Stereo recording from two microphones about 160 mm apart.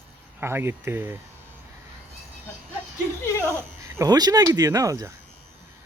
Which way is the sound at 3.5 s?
15° right (ahead or behind).